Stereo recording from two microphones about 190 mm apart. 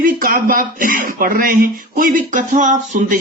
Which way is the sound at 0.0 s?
50° right (ahead or behind).